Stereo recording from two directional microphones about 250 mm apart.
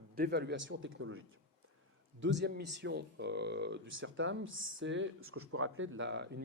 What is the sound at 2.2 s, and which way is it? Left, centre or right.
Speech, right.